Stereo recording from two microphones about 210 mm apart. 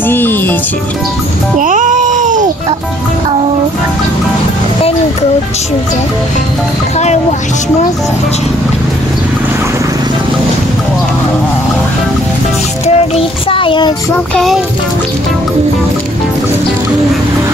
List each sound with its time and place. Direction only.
0.0 s music: 10° left (ahead or behind)
1.6 s baby cry: 40° right (ahead or behind)
12.8 s speech: 25° left (ahead or behind)
14.3 s music: centre (ahead or behind)